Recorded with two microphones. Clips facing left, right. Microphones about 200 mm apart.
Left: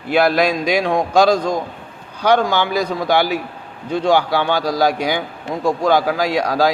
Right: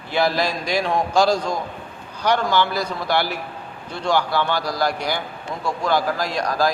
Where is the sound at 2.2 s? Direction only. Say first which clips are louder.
Left 4 dB; 90° left.